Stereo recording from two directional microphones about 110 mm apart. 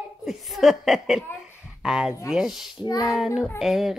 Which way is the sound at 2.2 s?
5° right (ahead or behind).